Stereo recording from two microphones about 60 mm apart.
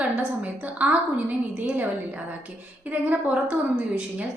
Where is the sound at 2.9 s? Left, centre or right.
Right.